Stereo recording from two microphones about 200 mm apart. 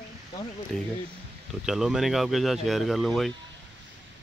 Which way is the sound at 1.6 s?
Centre (ahead or behind).